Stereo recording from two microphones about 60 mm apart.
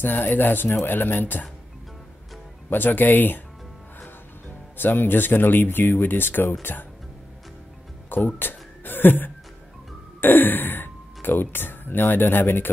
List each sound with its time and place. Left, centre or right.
0.0 s speech: left
2.7 s speech: left
4.5 s speech: left
8.1 s a sound: left
10.2 s sigh: left
11.2 s speech: left